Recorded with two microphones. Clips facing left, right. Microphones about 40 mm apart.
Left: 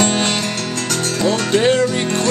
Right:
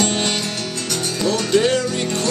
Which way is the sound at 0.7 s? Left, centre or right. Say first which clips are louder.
Left 3 dB; left.